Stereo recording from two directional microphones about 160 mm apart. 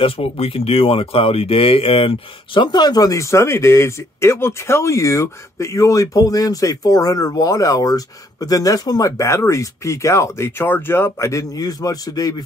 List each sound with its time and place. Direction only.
0.0 s speech: 35° left (ahead or behind)